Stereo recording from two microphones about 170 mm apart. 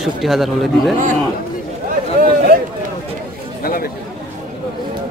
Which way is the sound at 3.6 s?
60° left (ahead or behind).